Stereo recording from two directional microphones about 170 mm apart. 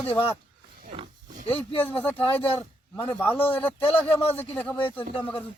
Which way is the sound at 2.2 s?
30° left (ahead or behind).